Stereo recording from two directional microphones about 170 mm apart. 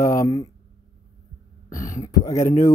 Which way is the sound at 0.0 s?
20° left (ahead or behind).